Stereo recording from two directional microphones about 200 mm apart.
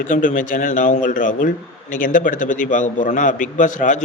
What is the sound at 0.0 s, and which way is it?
A man's voice, 40° left (ahead or behind).